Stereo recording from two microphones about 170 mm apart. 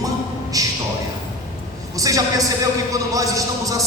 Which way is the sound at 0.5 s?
20° right (ahead or behind).